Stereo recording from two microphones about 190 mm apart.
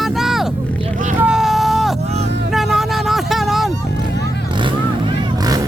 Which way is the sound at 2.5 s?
Centre (ahead or behind).